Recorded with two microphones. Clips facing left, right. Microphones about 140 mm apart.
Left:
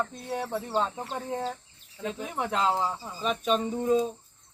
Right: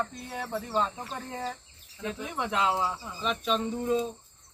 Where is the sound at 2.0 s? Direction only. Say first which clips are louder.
Left 1 dB; 35° left (ahead or behind).